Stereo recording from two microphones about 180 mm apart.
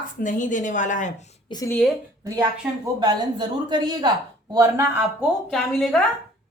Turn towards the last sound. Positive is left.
turn(degrees=0)  # may be behind; listen again after turning